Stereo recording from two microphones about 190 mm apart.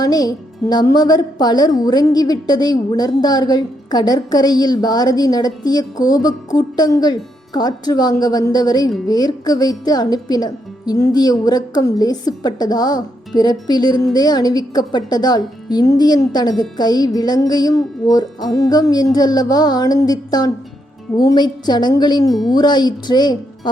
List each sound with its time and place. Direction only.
0.0 s a woman's voice: 20° left (ahead or behind)